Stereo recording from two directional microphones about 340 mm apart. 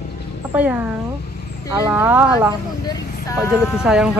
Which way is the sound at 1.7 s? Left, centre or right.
Centre.